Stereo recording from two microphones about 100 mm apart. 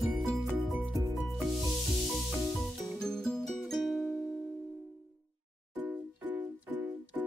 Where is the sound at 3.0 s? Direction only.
5° left (ahead or behind).